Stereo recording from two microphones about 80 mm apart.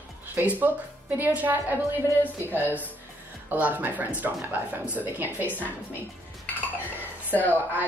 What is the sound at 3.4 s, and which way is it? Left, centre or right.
A woman's voice, right.